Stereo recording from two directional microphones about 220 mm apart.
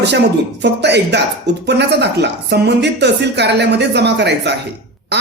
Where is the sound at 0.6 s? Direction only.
50° right (ahead or behind).